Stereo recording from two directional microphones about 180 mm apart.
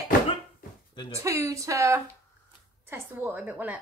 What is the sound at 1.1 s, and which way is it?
A woman's voice, 15° right (ahead or behind).